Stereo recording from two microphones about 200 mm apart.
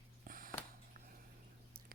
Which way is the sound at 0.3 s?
45° right (ahead or behind).